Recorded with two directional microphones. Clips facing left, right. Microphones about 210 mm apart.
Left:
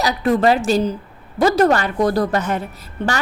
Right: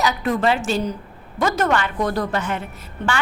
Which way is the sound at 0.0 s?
35° left (ahead or behind).